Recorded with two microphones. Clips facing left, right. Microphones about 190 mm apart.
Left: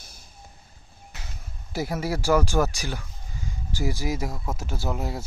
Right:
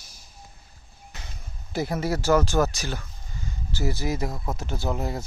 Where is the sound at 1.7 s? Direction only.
10° left (ahead or behind).